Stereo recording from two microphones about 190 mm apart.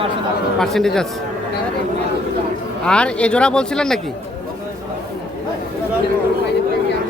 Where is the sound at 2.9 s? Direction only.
5° left (ahead or behind).